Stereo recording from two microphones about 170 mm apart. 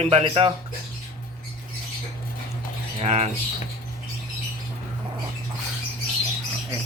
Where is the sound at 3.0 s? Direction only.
40° right (ahead or behind).